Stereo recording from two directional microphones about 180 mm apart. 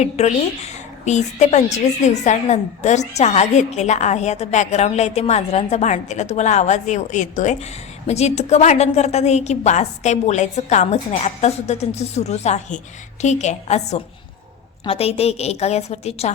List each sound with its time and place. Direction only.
0.0 s a woman's voice: 40° left (ahead or behind)